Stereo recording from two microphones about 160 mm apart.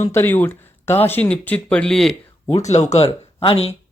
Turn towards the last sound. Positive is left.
turn(degrees=35)  # may be behind; listen again after turning